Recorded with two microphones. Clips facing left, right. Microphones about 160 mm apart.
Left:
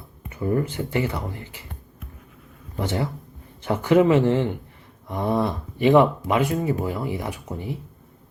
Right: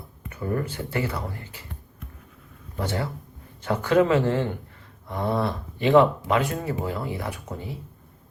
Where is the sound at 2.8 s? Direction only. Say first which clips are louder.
Left 3 dB; 20° left (ahead or behind).